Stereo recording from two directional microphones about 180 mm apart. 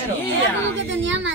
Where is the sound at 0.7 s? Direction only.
90° right.